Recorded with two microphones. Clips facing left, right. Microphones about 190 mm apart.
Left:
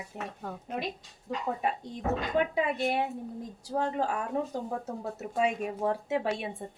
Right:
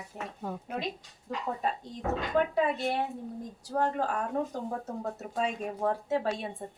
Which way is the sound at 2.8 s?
15° left (ahead or behind).